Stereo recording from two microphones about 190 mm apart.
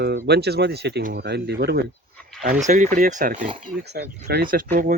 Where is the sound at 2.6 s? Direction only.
40° right (ahead or behind).